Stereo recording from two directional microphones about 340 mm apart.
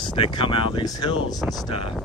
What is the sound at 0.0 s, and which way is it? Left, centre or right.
Speech, centre.